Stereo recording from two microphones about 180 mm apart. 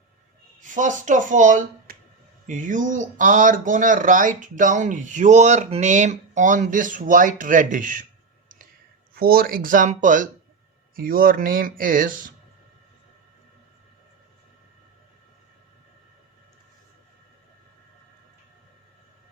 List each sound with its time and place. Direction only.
0.6 s speech: 45° right (ahead or behind)
9.1 s speech: 55° right (ahead or behind)